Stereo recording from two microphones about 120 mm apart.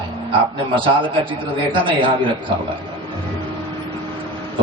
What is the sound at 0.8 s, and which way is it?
A man's voice, 45° right (ahead or behind).